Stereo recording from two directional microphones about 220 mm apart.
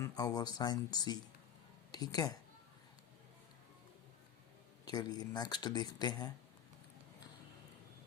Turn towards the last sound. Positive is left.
turn(degrees=20)  # may be behind; listen again after turning